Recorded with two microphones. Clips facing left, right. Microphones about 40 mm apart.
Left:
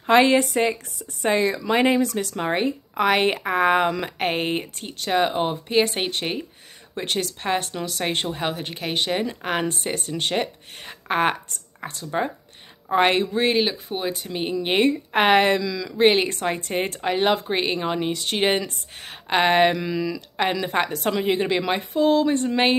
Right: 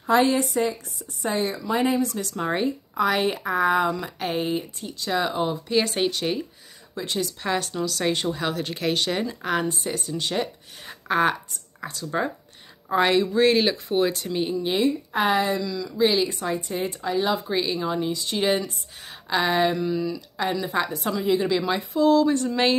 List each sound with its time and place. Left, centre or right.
0.0 s speech: left
1.2 s speech: left
2.3 s a woman's voice: left
7.0 s speech: left
7.4 s a woman's voice: left
9.7 s a woman's voice: left
13.5 s speech: centre
14.6 s speech: left
14.9 s speech: left
16.0 s speech: left
19.7 s speech: left
20.3 s a woman's voice: left